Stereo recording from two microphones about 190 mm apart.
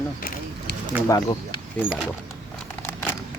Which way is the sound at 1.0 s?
20° left (ahead or behind).